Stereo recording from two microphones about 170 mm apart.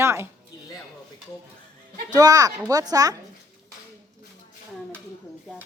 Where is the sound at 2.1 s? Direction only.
20° right (ahead or behind).